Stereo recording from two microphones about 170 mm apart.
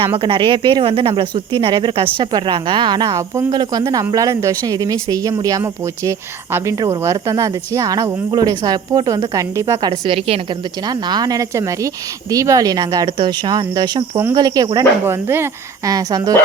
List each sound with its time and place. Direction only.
0.2 s speech: 30° right (ahead or behind)
10.8 s speech: 25° right (ahead or behind)